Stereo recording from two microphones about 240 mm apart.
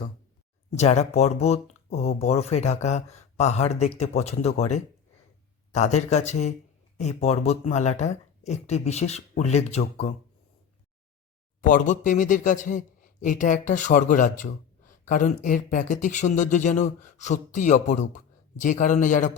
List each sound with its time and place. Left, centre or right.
0.8 s speech: left
11.6 s speech: left